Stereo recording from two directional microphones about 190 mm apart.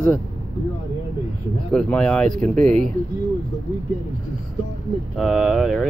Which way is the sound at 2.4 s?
40° right (ahead or behind).